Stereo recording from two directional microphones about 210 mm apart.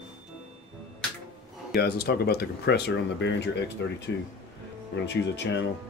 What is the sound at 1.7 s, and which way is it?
Speech, 50° left (ahead or behind).